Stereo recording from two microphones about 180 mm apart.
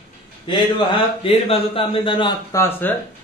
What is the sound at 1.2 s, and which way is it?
Speech, 30° left (ahead or behind).